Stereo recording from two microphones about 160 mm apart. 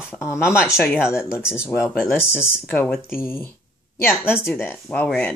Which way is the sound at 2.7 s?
15° left (ahead or behind).